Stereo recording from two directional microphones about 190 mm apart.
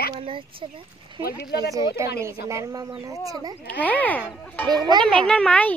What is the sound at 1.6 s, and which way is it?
Speech, 15° right (ahead or behind).